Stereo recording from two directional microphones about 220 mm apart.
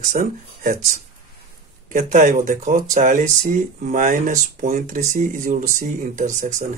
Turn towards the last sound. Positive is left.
turn(degrees=-35)  # may be behind; listen again after turning